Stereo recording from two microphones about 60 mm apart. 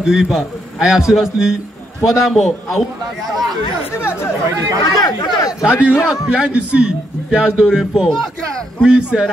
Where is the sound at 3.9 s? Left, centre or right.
Left.